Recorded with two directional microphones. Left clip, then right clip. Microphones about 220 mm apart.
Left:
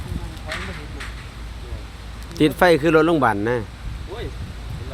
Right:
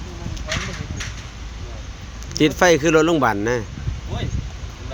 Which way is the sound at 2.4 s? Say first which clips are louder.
Even; 5° left (ahead or behind).